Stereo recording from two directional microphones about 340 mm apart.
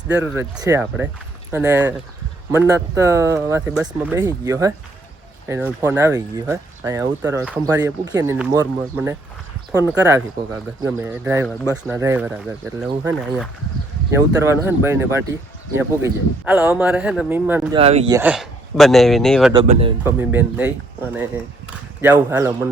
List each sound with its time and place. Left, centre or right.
0.2 s a man's voice: centre
17.7 s a man's voice: centre
19.5 s speech: centre
20.1 s a man's voice: centre